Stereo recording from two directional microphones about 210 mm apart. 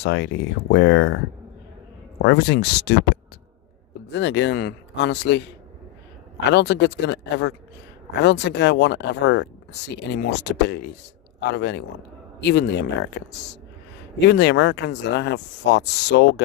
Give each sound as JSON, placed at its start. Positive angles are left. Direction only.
{"t": 0.0, "sound": "speech", "side_deg": 55}
{"t": 2.2, "sound": "speech", "side_deg": 55}
{"t": 4.1, "sound": "speech", "side_deg": 55}
{"t": 6.5, "sound": "speech", "side_deg": 55}